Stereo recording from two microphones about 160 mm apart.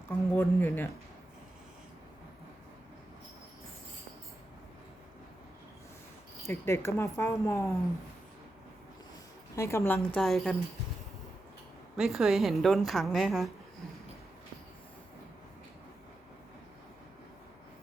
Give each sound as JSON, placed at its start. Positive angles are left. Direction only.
{"t": 0.1, "sound": "a woman's voice", "side_deg": 15}
{"t": 6.4, "sound": "a woman's voice", "side_deg": 15}
{"t": 9.6, "sound": "a woman's voice", "side_deg": 15}
{"t": 10.2, "sound": "a woman's voice", "side_deg": 5}
{"t": 11.9, "sound": "a woman's voice", "side_deg": 0}